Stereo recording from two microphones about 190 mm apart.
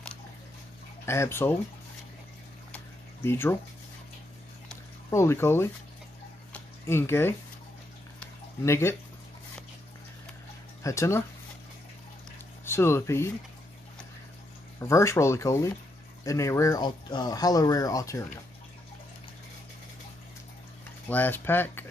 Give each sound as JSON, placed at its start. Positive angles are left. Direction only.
{"t": 1.0, "sound": "speech", "side_deg": 15}
{"t": 3.3, "sound": "speech", "side_deg": 10}
{"t": 5.1, "sound": "speech", "side_deg": 15}
{"t": 6.5, "sound": "a sound", "side_deg": 10}
{"t": 10.8, "sound": "speech", "side_deg": 15}
{"t": 12.6, "sound": "speech", "side_deg": 15}
{"t": 14.8, "sound": "speech", "side_deg": 15}
{"t": 21.1, "sound": "speech", "side_deg": 10}